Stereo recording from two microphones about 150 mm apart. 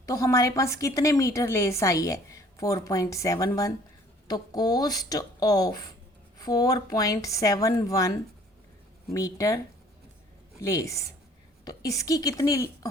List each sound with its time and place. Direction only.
0.0 s a woman's voice: 20° left (ahead or behind)
9.1 s a woman's voice: 20° left (ahead or behind)
10.6 s a woman's voice: 20° left (ahead or behind)